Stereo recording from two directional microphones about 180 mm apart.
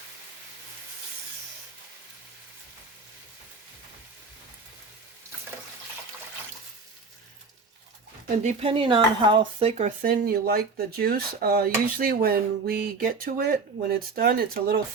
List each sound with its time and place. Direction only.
8.4 s speech: 30° right (ahead or behind)
10.0 s speech: 55° right (ahead or behind)